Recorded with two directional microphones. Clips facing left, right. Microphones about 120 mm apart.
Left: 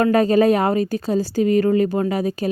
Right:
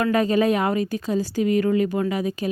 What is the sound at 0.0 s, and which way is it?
A woman's voice, 35° left (ahead or behind).